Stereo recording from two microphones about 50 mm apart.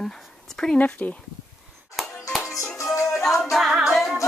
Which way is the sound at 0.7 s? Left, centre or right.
Left.